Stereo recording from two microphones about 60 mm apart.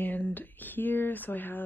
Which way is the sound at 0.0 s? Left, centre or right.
Left.